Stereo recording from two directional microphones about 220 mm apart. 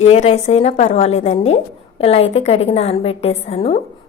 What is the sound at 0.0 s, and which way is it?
A woman's voice, 30° left (ahead or behind).